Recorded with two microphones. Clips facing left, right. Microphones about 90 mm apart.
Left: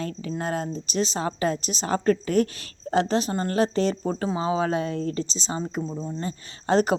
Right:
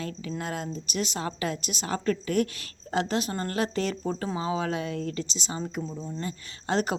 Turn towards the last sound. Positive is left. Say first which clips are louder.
# left 6 dB
turn(degrees=35)  # may be behind; listen again after turning